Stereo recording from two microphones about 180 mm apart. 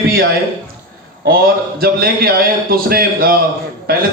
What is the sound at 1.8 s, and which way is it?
A man's voice, 55° right (ahead or behind).